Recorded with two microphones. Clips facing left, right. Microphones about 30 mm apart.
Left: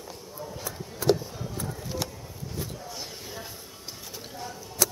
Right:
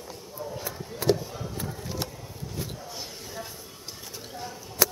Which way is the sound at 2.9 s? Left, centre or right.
Centre.